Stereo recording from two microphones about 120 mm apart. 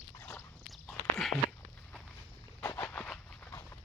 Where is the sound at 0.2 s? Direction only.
20° left (ahead or behind).